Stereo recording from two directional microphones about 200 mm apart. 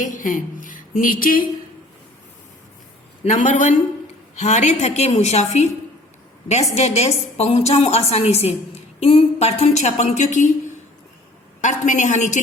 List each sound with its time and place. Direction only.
0.0 s a woman's voice: 40° left (ahead or behind)
3.2 s a woman's voice: 40° left (ahead or behind)
6.7 s a woman's voice: 30° left (ahead or behind)
11.6 s a woman's voice: 35° left (ahead or behind)